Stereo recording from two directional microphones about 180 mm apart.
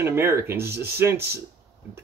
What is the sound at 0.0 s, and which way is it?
Speech, 15° right (ahead or behind).